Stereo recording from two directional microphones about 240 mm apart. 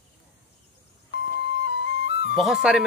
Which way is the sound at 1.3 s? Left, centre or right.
Left.